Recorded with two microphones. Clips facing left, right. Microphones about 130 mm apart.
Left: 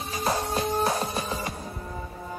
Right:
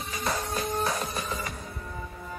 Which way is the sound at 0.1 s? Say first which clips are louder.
Left 4 dB; 30° left (ahead or behind).